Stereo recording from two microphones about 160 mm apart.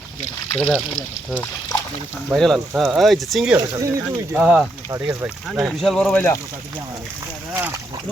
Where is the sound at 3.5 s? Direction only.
20° right (ahead or behind).